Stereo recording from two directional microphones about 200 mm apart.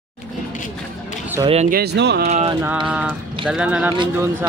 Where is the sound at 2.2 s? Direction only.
35° right (ahead or behind).